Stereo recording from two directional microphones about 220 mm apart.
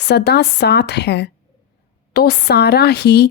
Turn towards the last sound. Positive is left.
turn(degrees=50)  # may be behind; listen again after turning